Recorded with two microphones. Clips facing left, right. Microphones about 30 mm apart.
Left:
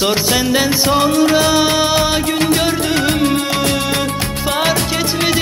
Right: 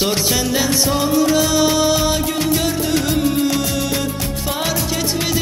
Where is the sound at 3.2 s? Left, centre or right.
Left.